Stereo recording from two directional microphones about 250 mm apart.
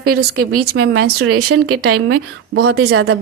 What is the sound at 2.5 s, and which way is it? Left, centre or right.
Speech, right.